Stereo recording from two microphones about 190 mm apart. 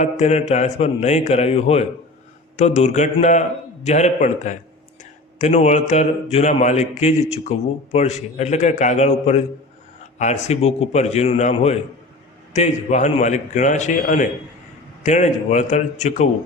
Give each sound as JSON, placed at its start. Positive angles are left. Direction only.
{"t": 0.0, "sound": "a man's voice", "side_deg": 35}